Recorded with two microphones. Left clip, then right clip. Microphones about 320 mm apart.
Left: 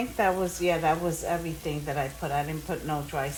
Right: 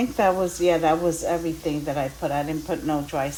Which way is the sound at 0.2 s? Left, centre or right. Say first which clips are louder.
Right 5 dB; right.